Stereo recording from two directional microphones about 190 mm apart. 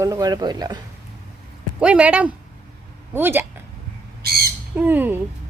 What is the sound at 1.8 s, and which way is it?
Speech, 5° right (ahead or behind).